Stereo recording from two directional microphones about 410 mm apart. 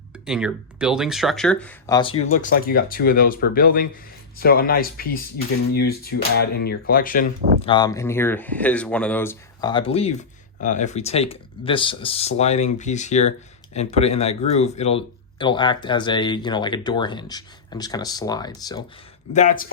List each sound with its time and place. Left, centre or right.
0.3 s speech: centre